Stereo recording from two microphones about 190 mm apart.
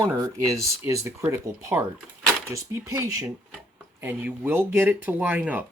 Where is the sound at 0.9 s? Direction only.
15° right (ahead or behind).